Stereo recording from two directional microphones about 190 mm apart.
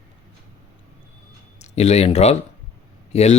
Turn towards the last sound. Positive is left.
turn(degrees=35)  # may be behind; listen again after turning